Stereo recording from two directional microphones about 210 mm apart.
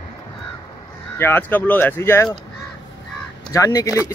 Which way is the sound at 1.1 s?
10° left (ahead or behind).